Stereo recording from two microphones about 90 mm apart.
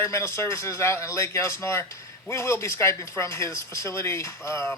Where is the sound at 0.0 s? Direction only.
30° left (ahead or behind).